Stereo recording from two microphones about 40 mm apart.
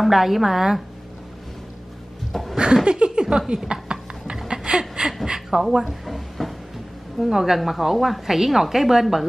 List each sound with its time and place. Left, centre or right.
0.0 s a woman's voice: centre
2.5 s a sound: right
5.2 s a woman's voice: centre
6.0 s a woman's voice: centre